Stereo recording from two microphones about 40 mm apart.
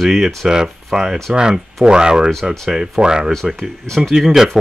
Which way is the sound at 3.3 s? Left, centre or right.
Centre.